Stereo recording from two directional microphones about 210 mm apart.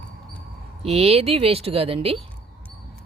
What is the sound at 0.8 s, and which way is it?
Speech, 30° right (ahead or behind).